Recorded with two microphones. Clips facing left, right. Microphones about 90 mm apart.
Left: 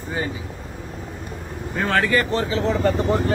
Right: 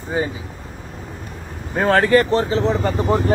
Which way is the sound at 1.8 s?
35° right (ahead or behind).